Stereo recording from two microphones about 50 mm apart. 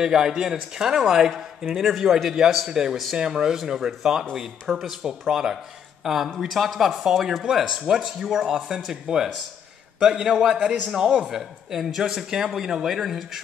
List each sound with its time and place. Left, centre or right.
0.0 s a man's voice: centre
10.5 s a man's voice: centre